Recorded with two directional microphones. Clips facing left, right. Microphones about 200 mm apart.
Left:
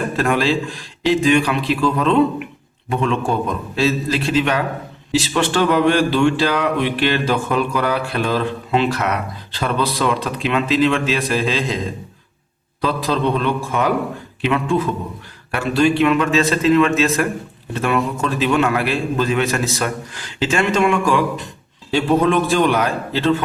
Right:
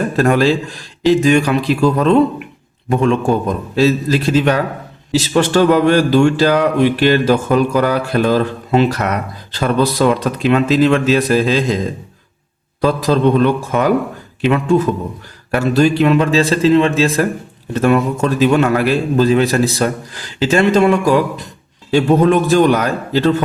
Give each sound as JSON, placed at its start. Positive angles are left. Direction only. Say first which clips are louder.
{"t": 0.2, "sound": "speech", "louder": "right 5 dB", "side_deg": -40}
{"t": 12.8, "sound": "speech", "louder": "right 6 dB", "side_deg": -45}
{"t": 17.7, "sound": "speech", "louder": "right 6 dB", "side_deg": -40}